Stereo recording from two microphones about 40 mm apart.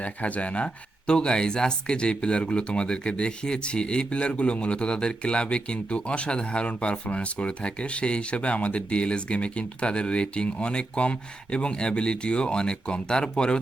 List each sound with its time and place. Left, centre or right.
0.0 s speech: left